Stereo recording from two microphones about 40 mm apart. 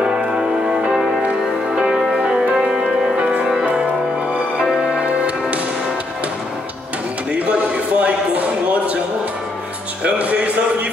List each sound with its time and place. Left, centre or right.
0.0 s music: centre
2.0 s music: centre
3.2 s music: right
7.3 s a sound: right
10.0 s music: right